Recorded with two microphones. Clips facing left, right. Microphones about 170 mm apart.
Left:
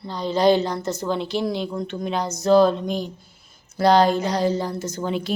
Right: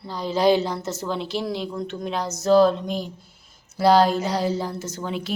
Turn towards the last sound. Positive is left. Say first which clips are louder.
# left 4 dB
turn(degrees=0)  # may be behind; listen again after turning